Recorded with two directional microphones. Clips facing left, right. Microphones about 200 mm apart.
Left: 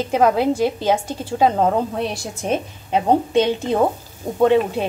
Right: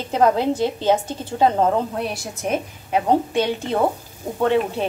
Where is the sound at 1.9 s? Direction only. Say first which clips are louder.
Left 2 dB; 25° left (ahead or behind).